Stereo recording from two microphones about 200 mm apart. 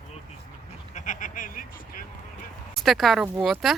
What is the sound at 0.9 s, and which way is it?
Sheep, 40° left (ahead or behind).